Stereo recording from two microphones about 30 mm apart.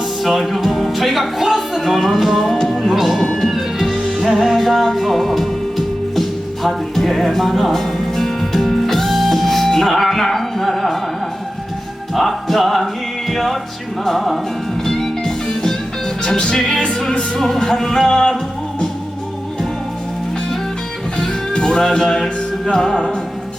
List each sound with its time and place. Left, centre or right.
0.2 s music: centre
2.4 s music: centre
2.8 s speech: centre
3.3 s music: centre
12.1 s music: centre
16.6 s music: left
21.5 s music: left